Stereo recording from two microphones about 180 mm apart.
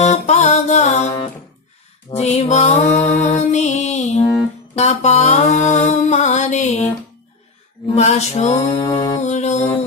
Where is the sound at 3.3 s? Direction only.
40° left (ahead or behind).